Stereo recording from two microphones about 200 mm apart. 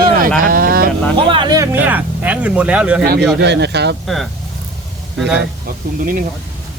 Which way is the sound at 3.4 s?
55° right (ahead or behind).